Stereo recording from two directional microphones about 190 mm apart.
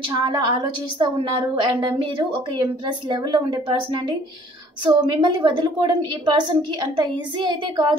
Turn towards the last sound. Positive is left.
turn(degrees=-25)  # may be behind; listen again after turning